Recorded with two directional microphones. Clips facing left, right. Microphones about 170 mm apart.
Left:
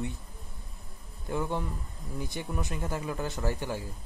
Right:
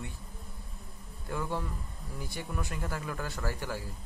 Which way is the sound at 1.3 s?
20° left (ahead or behind).